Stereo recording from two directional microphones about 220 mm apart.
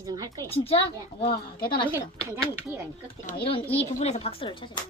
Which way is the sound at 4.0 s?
30° left (ahead or behind).